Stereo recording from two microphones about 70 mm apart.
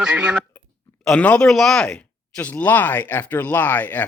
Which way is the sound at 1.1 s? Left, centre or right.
Centre.